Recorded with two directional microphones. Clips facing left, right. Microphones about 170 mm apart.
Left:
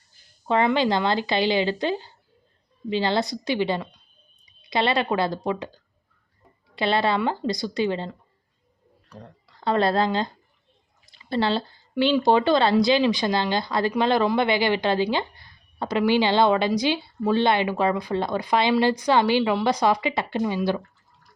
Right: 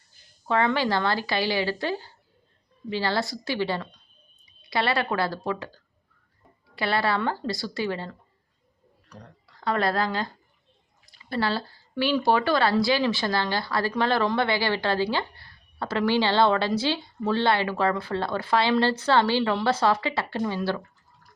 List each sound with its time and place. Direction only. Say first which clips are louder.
0.4 s speech: left 3 dB; 20° left (ahead or behind)
6.7 s speech: left 3 dB; 20° left (ahead or behind)